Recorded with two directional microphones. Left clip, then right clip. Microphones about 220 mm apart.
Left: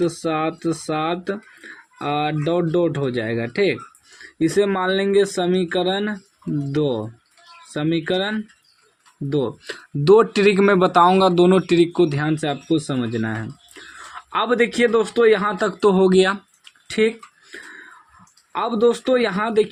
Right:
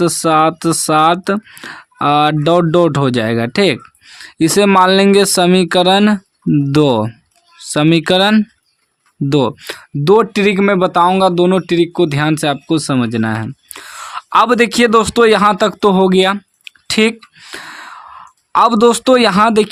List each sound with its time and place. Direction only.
0.0 s speech: 45° right (ahead or behind); by 12.0 s 15° right (ahead or behind)
12.0 s speech: 35° right (ahead or behind)
16.9 s a sound: 45° right (ahead or behind)
18.5 s speech: 50° right (ahead or behind)